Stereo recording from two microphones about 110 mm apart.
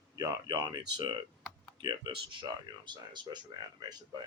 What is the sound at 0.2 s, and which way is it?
Speech, 35° right (ahead or behind).